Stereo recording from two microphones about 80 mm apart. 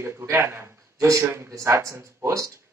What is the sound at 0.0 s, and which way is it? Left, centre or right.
Speech, right.